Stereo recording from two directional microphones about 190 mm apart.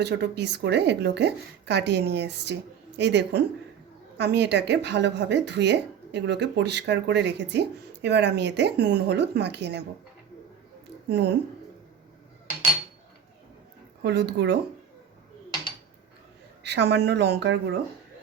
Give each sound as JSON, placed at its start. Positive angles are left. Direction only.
{"t": 0.0, "sound": "speech", "side_deg": -60}
{"t": 11.1, "sound": "speech", "side_deg": -60}
{"t": 14.0, "sound": "speech", "side_deg": -60}
{"t": 16.6, "sound": "speech", "side_deg": -60}